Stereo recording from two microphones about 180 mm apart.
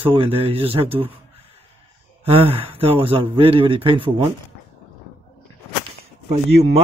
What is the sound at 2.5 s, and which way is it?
Speech, 30° right (ahead or behind).